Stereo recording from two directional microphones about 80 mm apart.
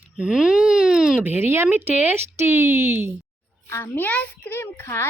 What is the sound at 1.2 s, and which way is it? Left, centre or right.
Speech, right.